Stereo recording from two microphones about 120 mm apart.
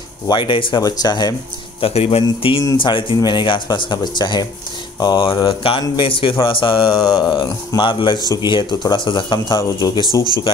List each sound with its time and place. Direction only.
0.3 s speech: 45° left (ahead or behind)
1.8 s speech: 50° left (ahead or behind)
7.0 s speech: 35° left (ahead or behind)
9.6 s speech: 30° left (ahead or behind)